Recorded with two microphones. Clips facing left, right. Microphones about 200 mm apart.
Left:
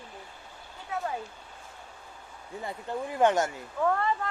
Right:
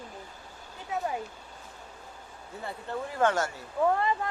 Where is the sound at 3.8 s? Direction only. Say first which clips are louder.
Right 1 dB; 15° right (ahead or behind).